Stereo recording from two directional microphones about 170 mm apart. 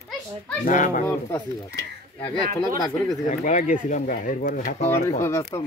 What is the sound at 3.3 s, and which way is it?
Speech, 45° left (ahead or behind).